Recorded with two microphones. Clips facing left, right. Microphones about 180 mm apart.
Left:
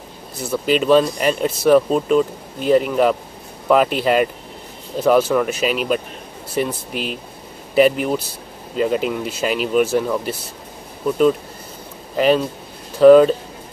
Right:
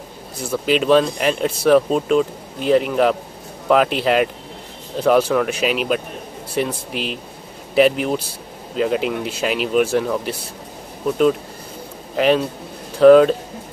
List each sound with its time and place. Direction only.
0.4 s speech: 10° right (ahead or behind)
0.7 s speech: centre (ahead or behind)
6.9 s speech: 45° left (ahead or behind)
7.7 s speech: centre (ahead or behind)
12.2 s speech: centre (ahead or behind)